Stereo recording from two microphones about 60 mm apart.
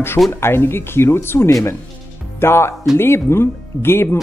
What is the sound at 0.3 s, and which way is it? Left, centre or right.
Speech, left.